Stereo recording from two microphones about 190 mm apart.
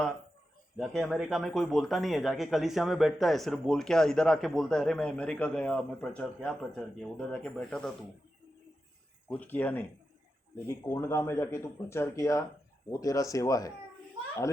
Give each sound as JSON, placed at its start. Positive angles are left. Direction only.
{"t": 0.8, "sound": "a man's voice", "side_deg": 0}
{"t": 9.3, "sound": "speech", "side_deg": 10}